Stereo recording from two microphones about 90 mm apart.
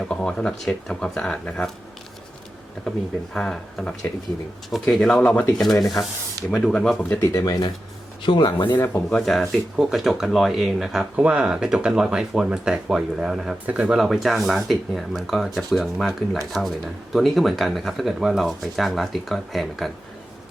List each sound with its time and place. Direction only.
0.0 s speech: 10° left (ahead or behind)
2.8 s speech: 5° left (ahead or behind)
5.3 s speech: 15° left (ahead or behind)
5.7 s speech: 40° left (ahead or behind)
6.7 s speech: 5° left (ahead or behind)
8.2 s speech: 60° left (ahead or behind)
8.9 s speech: 5° left (ahead or behind)
13.7 s speech: 15° right (ahead or behind)
13.9 s speech: centre (ahead or behind)